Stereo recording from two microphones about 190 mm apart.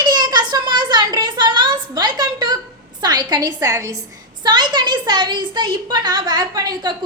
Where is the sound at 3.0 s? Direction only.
20° right (ahead or behind).